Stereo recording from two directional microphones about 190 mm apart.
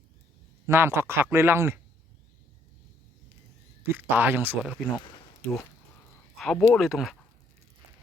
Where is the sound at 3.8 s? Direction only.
10° right (ahead or behind).